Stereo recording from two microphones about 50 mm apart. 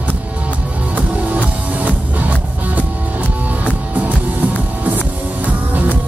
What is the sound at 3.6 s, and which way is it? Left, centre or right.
Music, right.